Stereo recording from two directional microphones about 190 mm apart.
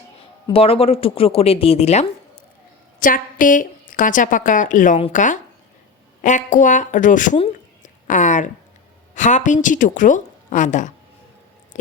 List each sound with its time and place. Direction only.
0.4 s a woman's voice: 30° left (ahead or behind)
3.0 s a woman's voice: 45° left (ahead or behind)
7.3 s a sound: 35° left (ahead or behind)
9.1 s a woman's voice: 40° left (ahead or behind)